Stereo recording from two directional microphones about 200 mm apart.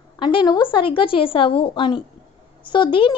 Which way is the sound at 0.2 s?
20° left (ahead or behind).